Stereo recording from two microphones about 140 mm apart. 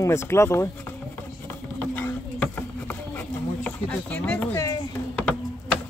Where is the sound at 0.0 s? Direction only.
20° left (ahead or behind).